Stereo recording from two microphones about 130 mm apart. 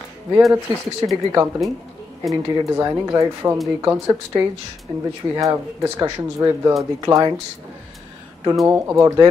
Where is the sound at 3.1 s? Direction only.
20° right (ahead or behind).